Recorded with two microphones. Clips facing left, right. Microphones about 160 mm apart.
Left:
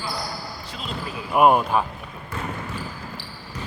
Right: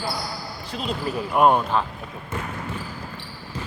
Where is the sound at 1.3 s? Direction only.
10° left (ahead or behind).